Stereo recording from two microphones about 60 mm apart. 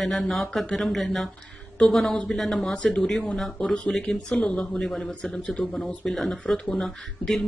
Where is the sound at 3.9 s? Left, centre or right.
Centre.